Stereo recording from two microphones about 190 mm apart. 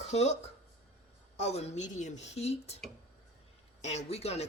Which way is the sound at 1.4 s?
35° left (ahead or behind).